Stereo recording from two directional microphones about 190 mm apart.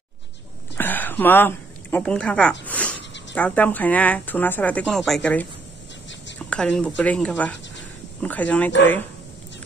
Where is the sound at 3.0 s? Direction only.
70° left (ahead or behind).